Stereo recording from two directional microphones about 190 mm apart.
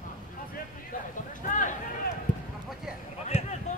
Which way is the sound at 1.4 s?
45° left (ahead or behind).